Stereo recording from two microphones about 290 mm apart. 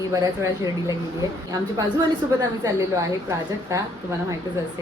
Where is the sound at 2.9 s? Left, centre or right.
Centre.